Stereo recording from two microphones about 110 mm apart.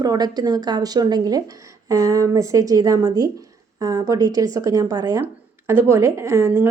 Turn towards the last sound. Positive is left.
turn(degrees=-25)  # may be behind; listen again after turning